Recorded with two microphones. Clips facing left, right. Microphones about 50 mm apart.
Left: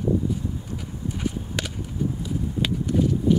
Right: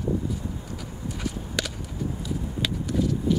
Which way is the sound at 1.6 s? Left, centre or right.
Left.